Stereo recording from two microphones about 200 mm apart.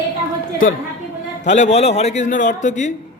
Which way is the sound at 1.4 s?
35° left (ahead or behind).